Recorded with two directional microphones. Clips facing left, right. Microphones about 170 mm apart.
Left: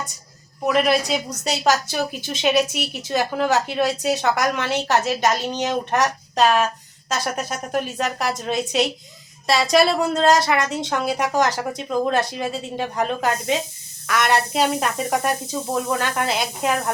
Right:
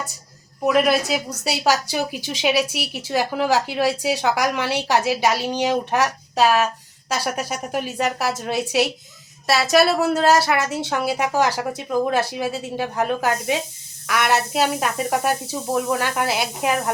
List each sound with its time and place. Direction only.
0.6 s a woman's voice: 5° right (ahead or behind)